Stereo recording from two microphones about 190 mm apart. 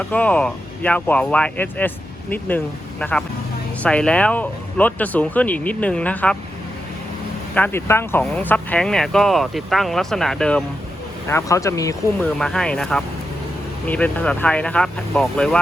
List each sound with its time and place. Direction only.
0.1 s speech: 5° left (ahead or behind)
3.0 s speech: 5° left (ahead or behind)
7.5 s speech: 10° left (ahead or behind)
11.3 s speech: 15° left (ahead or behind)
12.4 s speech: 5° left (ahead or behind)